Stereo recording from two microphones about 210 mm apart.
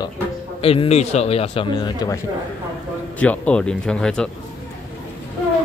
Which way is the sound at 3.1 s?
5° left (ahead or behind).